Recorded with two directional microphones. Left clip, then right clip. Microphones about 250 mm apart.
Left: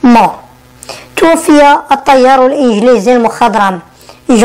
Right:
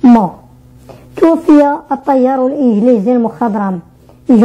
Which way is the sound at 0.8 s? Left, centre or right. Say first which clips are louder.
Left 11 dB; centre.